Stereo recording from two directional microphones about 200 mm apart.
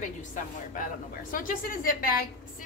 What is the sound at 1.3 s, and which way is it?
Speech, 45° left (ahead or behind).